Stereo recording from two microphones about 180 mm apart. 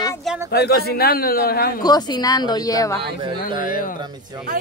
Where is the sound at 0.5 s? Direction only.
65° left (ahead or behind).